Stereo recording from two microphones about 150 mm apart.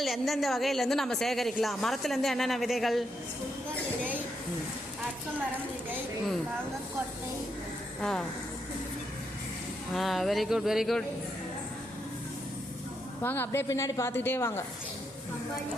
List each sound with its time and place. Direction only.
0.0 s a woman's voice: centre (ahead or behind)
9.9 s a woman's voice: centre (ahead or behind)
13.2 s a woman's voice: 15° left (ahead or behind)